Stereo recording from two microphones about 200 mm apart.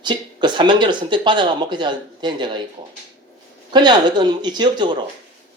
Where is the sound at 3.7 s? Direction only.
20° right (ahead or behind).